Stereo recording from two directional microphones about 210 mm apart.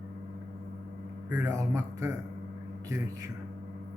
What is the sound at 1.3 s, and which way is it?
Speech, 15° right (ahead or behind).